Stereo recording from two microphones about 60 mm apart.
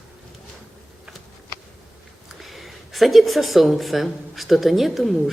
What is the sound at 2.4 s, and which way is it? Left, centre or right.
Speech, centre.